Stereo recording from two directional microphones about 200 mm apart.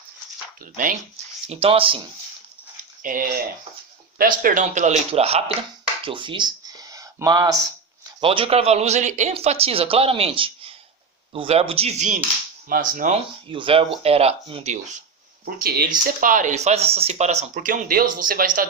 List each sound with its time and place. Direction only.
0.6 s speech: 40° right (ahead or behind)
3.0 s speech: 45° right (ahead or behind)
6.0 s a sound: 25° right (ahead or behind)
8.2 s speech: 25° right (ahead or behind); by 13.1 s 40° right (ahead or behind)
13.5 s speech: 25° right (ahead or behind)
15.4 s speech: 50° right (ahead or behind)